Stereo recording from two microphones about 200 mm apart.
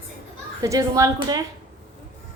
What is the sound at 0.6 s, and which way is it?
Speech, 15° right (ahead or behind).